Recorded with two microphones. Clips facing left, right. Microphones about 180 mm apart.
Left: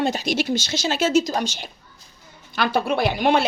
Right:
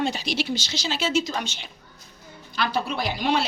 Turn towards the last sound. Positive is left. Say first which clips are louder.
# left 5 dB
turn(degrees=55)  # may be behind; listen again after turning